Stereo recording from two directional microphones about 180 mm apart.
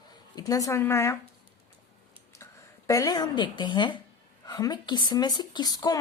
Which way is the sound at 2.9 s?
20° left (ahead or behind).